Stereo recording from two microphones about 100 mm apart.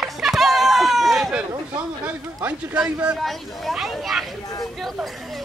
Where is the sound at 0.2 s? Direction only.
Centre (ahead or behind).